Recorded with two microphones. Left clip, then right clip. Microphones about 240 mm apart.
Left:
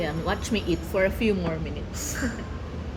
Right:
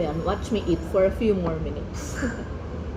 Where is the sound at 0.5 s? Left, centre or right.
Centre.